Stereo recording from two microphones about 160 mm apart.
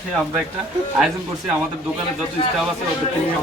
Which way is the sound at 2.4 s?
35° left (ahead or behind).